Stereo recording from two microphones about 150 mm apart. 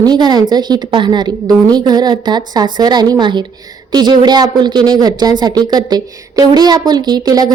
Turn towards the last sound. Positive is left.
turn(degrees=-25)  # may be behind; listen again after turning